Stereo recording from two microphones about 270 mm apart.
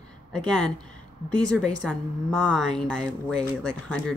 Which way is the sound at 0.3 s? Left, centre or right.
Centre.